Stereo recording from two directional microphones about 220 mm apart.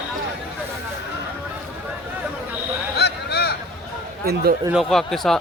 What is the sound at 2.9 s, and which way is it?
Honk, 50° left (ahead or behind).